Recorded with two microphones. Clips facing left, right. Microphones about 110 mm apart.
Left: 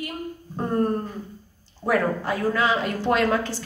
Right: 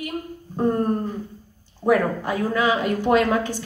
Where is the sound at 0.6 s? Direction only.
15° right (ahead or behind).